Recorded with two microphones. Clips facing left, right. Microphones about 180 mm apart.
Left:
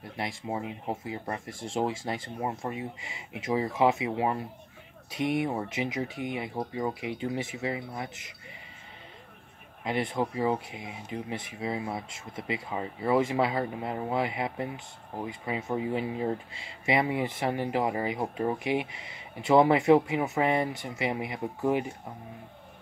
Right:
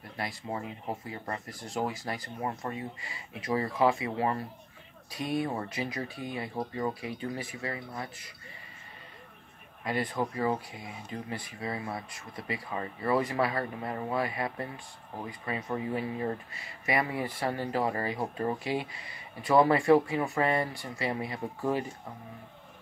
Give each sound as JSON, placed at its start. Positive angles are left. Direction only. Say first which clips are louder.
{"t": 0.0, "sound": "speech", "louder": "left 2 dB", "side_deg": 25}
{"t": 9.8, "sound": "speech", "louder": "left 2 dB", "side_deg": 25}